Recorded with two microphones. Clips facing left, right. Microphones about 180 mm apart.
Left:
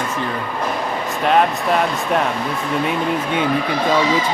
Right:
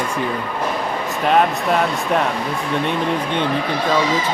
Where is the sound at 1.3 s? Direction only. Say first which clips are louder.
Even; centre (ahead or behind).